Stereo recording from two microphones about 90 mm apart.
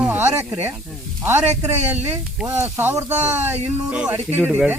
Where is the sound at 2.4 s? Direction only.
25° right (ahead or behind).